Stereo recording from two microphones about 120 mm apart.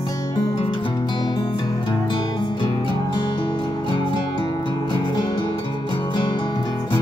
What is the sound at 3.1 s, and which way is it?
Music, 45° left (ahead or behind).